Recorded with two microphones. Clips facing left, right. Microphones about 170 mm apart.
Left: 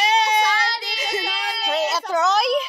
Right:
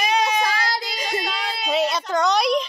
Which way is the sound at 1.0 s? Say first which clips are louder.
Left 3 dB; 5° left (ahead or behind).